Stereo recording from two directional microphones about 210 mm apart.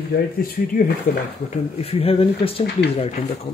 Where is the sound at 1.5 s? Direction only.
30° left (ahead or behind).